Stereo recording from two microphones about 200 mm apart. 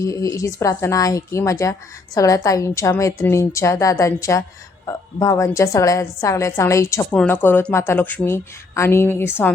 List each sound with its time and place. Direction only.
0.0 s a woman's voice: 15° left (ahead or behind)